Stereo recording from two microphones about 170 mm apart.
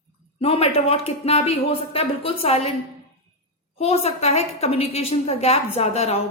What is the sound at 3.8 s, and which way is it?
A woman's voice, 35° left (ahead or behind).